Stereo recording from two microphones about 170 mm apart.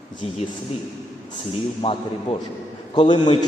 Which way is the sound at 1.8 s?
35° left (ahead or behind).